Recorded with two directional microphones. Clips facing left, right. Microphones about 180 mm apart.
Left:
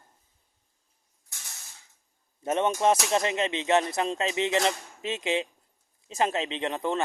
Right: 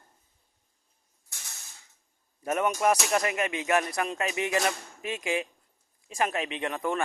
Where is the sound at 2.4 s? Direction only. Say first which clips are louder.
Left 2 dB; 25° left (ahead or behind).